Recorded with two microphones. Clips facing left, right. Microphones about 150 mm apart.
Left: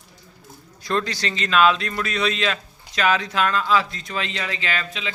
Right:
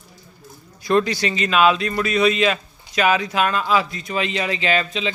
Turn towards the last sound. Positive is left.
turn(degrees=-20)  # may be behind; listen again after turning